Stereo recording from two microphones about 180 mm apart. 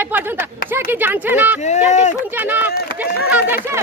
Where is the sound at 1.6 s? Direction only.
40° left (ahead or behind).